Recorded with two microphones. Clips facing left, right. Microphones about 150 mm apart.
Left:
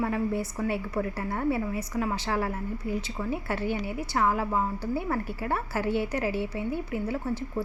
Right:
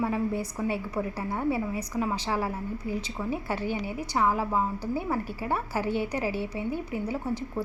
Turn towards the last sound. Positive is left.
turn(degrees=-15)  # may be behind; listen again after turning